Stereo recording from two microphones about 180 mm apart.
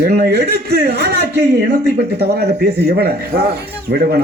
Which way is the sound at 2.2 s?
65° right (ahead or behind).